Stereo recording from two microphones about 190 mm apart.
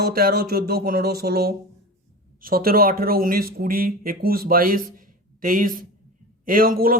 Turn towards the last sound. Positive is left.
turn(degrees=-50)  # may be behind; listen again after turning